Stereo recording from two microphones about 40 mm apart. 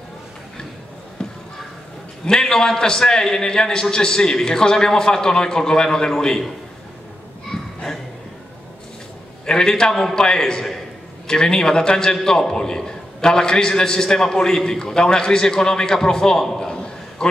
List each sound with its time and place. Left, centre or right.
2.2 s a man's voice: centre
7.5 s a sound: centre
9.5 s a man's voice: centre